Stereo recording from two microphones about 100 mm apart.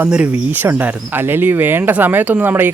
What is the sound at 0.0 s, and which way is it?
Speech, 15° right (ahead or behind).